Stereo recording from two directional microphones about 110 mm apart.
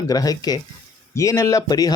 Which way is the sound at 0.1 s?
35° left (ahead or behind).